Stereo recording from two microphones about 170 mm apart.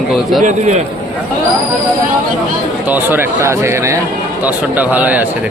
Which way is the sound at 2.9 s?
10° right (ahead or behind).